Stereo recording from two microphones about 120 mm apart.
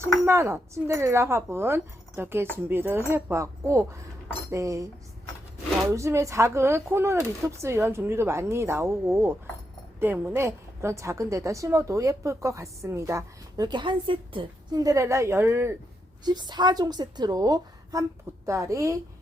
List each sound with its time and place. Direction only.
0.3 s a woman's voice: 20° right (ahead or behind)
5.9 s a woman's voice: 25° right (ahead or behind); by 14.8 s 45° right (ahead or behind)
14.8 s a woman's voice: 25° right (ahead or behind)
16.2 s a woman's voice: 35° right (ahead or behind)